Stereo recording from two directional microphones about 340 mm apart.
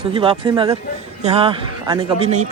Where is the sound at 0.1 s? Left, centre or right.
Centre.